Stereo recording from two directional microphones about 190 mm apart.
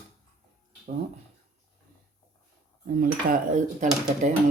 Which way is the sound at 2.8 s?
50° right (ahead or behind).